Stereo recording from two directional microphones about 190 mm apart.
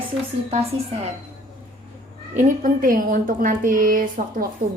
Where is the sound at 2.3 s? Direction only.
45° right (ahead or behind).